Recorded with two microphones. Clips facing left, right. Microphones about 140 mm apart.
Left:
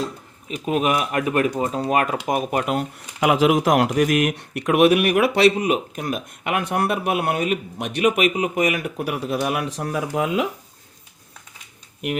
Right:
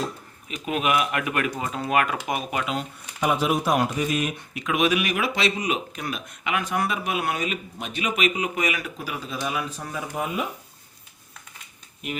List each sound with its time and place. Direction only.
0.4 s speech: 35° left (ahead or behind)
3.2 s speech: 90° left